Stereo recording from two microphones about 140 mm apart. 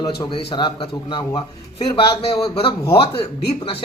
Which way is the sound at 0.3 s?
35° left (ahead or behind).